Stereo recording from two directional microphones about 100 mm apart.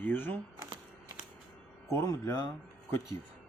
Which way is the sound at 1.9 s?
30° left (ahead or behind).